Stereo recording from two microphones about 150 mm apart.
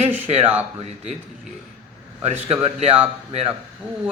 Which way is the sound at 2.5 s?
40° right (ahead or behind).